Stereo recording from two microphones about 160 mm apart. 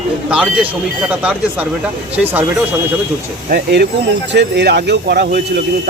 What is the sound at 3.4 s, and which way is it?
Speech, 80° right.